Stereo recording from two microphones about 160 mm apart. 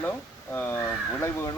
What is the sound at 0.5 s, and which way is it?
Speech, 10° left (ahead or behind).